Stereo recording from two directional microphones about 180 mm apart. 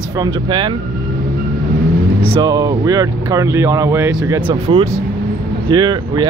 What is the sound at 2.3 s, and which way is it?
Speech, 20° right (ahead or behind).